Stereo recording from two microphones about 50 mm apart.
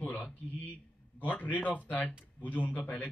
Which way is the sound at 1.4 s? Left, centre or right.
Left.